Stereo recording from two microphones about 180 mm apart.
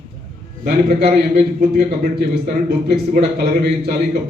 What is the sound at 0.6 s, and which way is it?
A man's voice, 55° right (ahead or behind).